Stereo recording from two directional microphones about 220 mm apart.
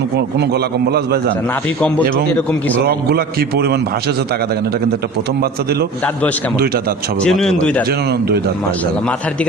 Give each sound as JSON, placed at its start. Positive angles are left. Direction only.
{"t": 0.3, "sound": "a man's voice", "side_deg": -45}
{"t": 2.3, "sound": "speech", "side_deg": 5}
{"t": 2.8, "sound": "a man's voice", "side_deg": -45}
{"t": 7.2, "sound": "speech", "side_deg": 0}